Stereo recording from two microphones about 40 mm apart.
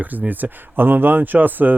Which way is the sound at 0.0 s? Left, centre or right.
Right.